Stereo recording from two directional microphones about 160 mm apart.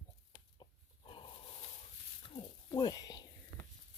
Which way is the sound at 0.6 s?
30° left (ahead or behind).